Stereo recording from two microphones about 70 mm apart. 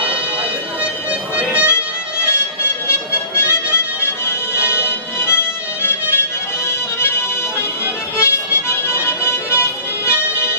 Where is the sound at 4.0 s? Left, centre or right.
Left.